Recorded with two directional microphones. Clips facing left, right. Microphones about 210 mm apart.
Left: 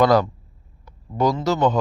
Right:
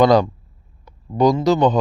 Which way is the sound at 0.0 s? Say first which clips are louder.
Right 3 dB; 20° right (ahead or behind).